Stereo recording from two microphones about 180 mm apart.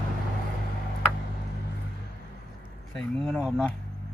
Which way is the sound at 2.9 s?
5° left (ahead or behind).